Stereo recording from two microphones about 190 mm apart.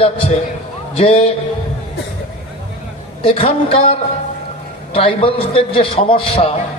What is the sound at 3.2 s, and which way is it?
A man's voice, 30° left (ahead or behind).